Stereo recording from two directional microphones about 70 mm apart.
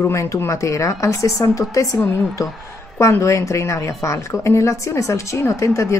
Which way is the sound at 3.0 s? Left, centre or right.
Left.